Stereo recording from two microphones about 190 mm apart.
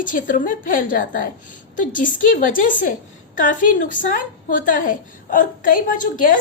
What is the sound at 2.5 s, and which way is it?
A woman's voice, 45° left (ahead or behind).